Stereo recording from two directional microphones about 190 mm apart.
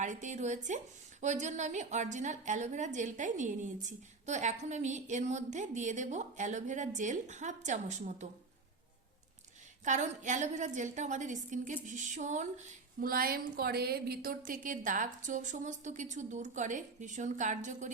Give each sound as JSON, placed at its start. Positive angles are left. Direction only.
{"t": 0.0, "sound": "a woman's voice", "side_deg": -40}
{"t": 9.8, "sound": "a woman's voice", "side_deg": -40}